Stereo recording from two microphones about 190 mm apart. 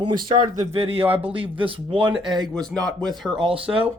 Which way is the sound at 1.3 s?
30° right (ahead or behind).